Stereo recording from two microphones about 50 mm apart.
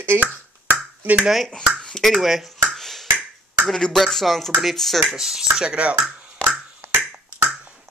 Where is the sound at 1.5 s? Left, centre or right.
Centre.